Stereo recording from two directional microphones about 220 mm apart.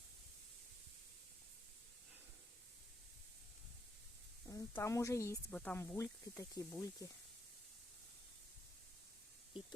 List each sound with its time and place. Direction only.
4.4 s speech: 15° left (ahead or behind)